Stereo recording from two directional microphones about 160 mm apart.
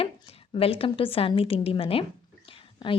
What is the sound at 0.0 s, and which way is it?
A woman's voice, 35° left (ahead or behind).